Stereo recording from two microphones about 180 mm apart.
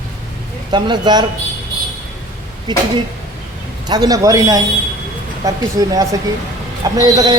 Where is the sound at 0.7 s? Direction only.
25° right (ahead or behind).